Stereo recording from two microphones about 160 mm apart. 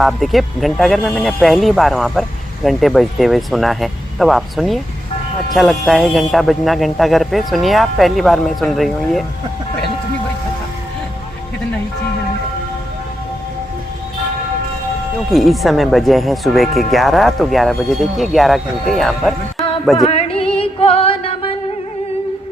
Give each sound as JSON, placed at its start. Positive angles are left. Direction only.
{"t": 0.0, "sound": "speech", "side_deg": 0}
{"t": 15.3, "sound": "speech", "side_deg": 0}
{"t": 20.1, "sound": "music", "side_deg": 40}